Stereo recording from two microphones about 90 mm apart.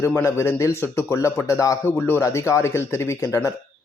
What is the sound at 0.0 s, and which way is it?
A man's voice, 30° left (ahead or behind).